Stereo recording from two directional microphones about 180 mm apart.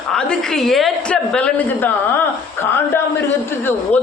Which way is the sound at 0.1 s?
5° left (ahead or behind).